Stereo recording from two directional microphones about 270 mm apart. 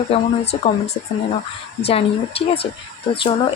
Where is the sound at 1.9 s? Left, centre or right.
Left.